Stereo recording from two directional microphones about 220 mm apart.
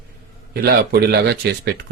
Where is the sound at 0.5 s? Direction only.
45° right (ahead or behind).